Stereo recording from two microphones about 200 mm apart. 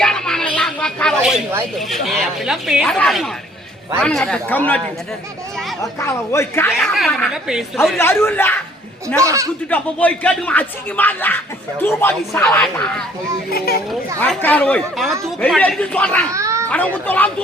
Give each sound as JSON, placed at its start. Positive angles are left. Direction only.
{"t": 0.0, "sound": "a sound", "side_deg": 5}
{"t": 4.0, "sound": "speech", "side_deg": 5}
{"t": 5.8, "sound": "speech", "side_deg": 15}
{"t": 6.7, "sound": "a woman's voice", "side_deg": 0}
{"t": 8.2, "sound": "speech", "side_deg": 10}
{"t": 9.2, "sound": "speech", "side_deg": -15}
{"t": 9.6, "sound": "speech", "side_deg": 10}
{"t": 13.5, "sound": "a child's voice", "side_deg": 50}
{"t": 14.2, "sound": "speech", "side_deg": 10}
{"t": 16.3, "sound": "children playing", "side_deg": -15}
{"t": 16.6, "sound": "speech", "side_deg": 5}